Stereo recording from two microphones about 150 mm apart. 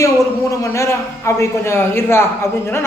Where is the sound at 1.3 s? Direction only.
20° left (ahead or behind).